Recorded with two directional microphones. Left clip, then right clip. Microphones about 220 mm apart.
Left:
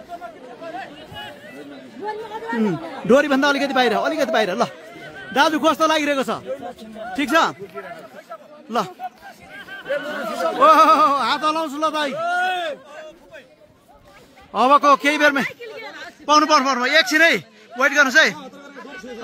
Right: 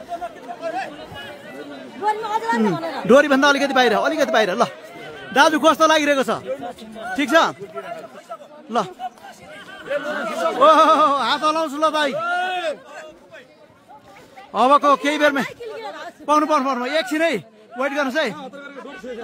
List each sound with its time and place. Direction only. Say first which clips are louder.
2.6 s a man's voice: right 3 dB; centre (ahead or behind)
8.6 s a man's voice: right 1 dB; centre (ahead or behind)
9.8 s speech: right 1 dB; 35° left (ahead or behind)
10.6 s a man's voice: left 1 dB; centre (ahead or behind)
12.2 s a sound: left 1 dB; 50° left (ahead or behind)
14.5 s a man's voice: left 1 dB; centre (ahead or behind)
15.4 s a sound: even; 30° right (ahead or behind)
16.3 s a man's voice: left 2 dB; 5° right (ahead or behind)